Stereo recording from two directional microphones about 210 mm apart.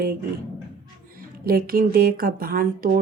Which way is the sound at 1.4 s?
45° right (ahead or behind).